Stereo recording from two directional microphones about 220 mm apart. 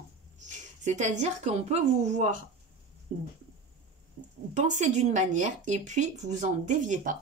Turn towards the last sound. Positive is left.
turn(degrees=-35)  # may be behind; listen again after turning